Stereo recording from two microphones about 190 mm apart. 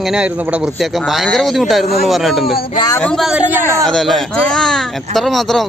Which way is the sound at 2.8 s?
15° left (ahead or behind).